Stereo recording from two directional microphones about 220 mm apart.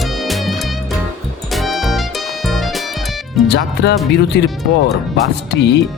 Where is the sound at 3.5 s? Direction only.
50° left (ahead or behind).